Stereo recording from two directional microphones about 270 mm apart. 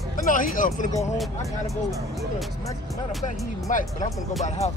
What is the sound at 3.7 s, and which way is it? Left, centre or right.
Speech, left.